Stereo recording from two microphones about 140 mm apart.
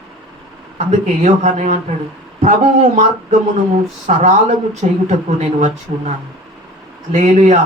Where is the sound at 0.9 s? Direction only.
55° right (ahead or behind).